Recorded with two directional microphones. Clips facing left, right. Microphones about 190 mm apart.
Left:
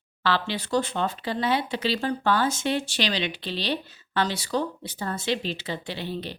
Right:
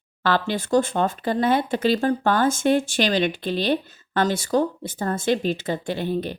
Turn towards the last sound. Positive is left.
turn(degrees=-50)  # may be behind; listen again after turning